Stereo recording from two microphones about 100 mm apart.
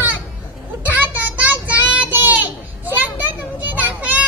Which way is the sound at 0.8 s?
15° right (ahead or behind).